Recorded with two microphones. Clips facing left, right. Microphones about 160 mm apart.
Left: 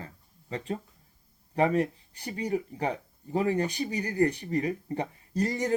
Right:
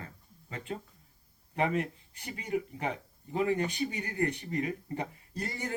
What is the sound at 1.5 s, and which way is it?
Speech, 35° left (ahead or behind).